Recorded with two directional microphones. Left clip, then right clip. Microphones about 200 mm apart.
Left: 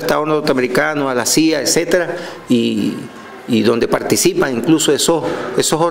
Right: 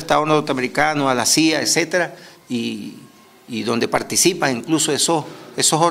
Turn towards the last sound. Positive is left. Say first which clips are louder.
# left 2 dB
turn(degrees=-30)  # may be behind; listen again after turning